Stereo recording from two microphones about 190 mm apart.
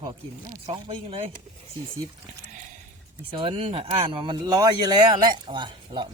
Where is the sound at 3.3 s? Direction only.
30° right (ahead or behind).